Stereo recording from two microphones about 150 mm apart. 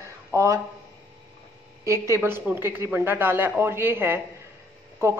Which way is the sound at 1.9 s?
15° right (ahead or behind).